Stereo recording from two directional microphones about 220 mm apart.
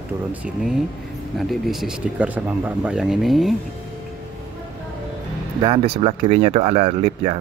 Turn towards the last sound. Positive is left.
turn(degrees=-30)  # may be behind; listen again after turning